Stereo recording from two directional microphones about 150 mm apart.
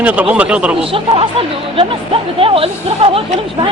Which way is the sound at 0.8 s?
40° right (ahead or behind).